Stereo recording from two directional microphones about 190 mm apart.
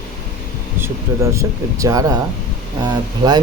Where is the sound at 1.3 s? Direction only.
15° right (ahead or behind).